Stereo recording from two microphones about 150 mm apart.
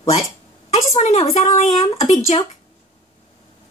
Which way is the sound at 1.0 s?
55° left (ahead or behind).